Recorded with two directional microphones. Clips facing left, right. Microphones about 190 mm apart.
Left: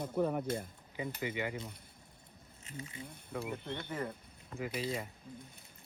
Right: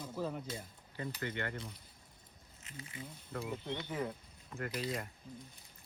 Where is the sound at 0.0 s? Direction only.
60° left (ahead or behind).